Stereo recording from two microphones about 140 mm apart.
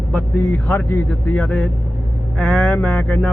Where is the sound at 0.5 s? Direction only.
5° left (ahead or behind).